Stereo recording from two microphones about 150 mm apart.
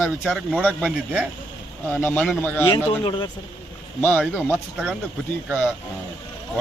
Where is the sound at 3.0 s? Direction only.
30° left (ahead or behind).